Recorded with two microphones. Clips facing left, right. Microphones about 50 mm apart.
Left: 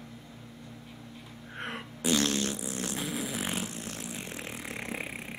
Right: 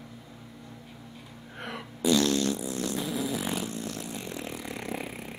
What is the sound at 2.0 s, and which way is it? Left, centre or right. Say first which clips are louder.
Fart: right 4 dB; left.